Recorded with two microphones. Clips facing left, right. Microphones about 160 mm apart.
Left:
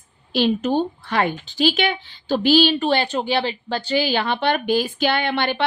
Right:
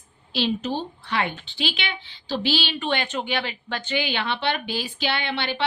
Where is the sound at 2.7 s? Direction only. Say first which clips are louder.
Left 6 dB; 35° left (ahead or behind).